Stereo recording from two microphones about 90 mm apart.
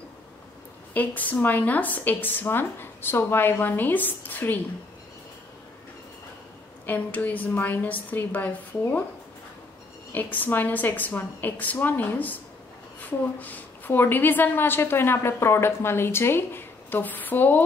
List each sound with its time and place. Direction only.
0.9 s a woman's voice: 20° left (ahead or behind)
6.9 s a woman's voice: 20° left (ahead or behind)
10.1 s a woman's voice: 20° left (ahead or behind)